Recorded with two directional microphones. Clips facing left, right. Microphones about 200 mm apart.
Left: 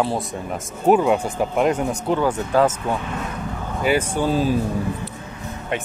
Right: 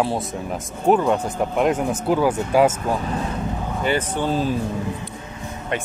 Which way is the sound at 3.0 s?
35° right (ahead or behind).